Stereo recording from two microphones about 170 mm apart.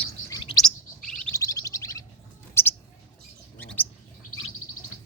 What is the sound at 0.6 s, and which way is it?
Chirp, 5° left (ahead or behind).